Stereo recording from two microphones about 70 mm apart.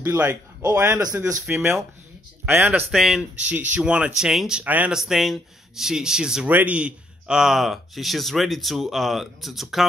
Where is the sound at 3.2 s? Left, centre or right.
Centre.